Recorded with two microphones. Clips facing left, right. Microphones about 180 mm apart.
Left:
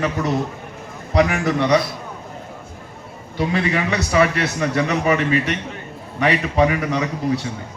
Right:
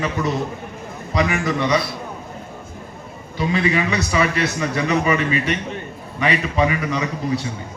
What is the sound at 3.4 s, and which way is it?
A man's voice, 60° left (ahead or behind).